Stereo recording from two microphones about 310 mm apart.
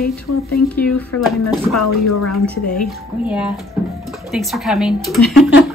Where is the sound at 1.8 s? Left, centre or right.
Left.